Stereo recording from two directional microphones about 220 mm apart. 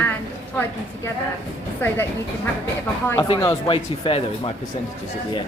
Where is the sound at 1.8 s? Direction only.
10° left (ahead or behind).